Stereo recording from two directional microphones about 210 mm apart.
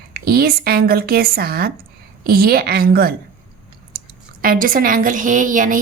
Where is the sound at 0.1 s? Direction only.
45° right (ahead or behind).